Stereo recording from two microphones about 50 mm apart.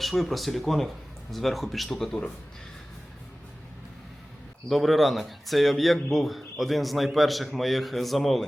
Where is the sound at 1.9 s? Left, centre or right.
Centre.